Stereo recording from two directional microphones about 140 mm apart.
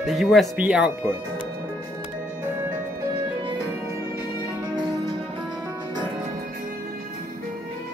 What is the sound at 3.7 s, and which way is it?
Music, 15° right (ahead or behind).